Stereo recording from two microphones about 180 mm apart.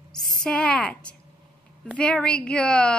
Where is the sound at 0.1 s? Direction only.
Centre (ahead or behind).